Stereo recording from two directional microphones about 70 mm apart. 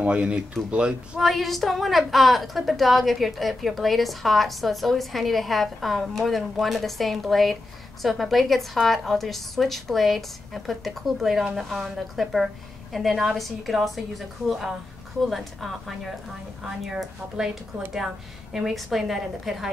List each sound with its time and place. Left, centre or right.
0.0 s speech: centre
1.2 s a woman's voice: centre